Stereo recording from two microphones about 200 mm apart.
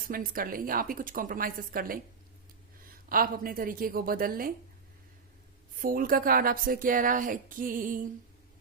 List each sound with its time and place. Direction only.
0.1 s a woman's voice: 45° right (ahead or behind)
5.7 s a woman's voice: 45° right (ahead or behind)